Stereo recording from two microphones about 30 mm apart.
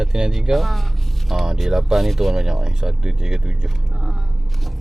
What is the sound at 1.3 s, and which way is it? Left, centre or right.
Speech, centre.